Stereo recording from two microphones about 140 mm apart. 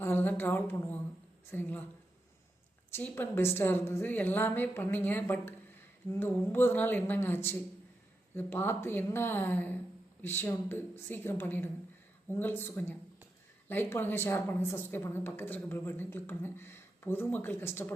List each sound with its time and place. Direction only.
0.0 s a woman's voice: 15° left (ahead or behind)
2.9 s a woman's voice: 15° left (ahead or behind)